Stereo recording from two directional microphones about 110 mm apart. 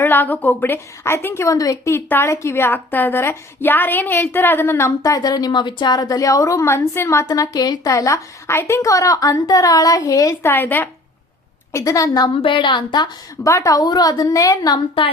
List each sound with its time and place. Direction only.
0.0 s a woman's voice: 15° left (ahead or behind)
10.5 s a woman's voice: 15° left (ahead or behind)
11.7 s a woman's voice: 30° left (ahead or behind)
12.4 s a woman's voice: 50° left (ahead or behind); by 14.8 s 35° left (ahead or behind)